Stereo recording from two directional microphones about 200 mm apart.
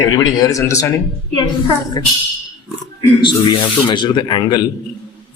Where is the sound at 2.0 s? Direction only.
20° left (ahead or behind).